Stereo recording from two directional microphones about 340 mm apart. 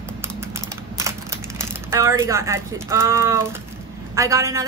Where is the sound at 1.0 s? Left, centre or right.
Centre.